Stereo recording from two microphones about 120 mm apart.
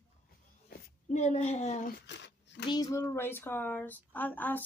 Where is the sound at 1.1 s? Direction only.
70° left (ahead or behind).